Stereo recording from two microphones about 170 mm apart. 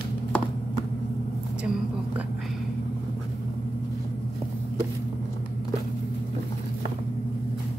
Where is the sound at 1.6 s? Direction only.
5° right (ahead or behind).